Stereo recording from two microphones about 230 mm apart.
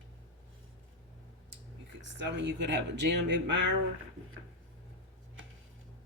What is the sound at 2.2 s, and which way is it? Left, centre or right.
Speech, right.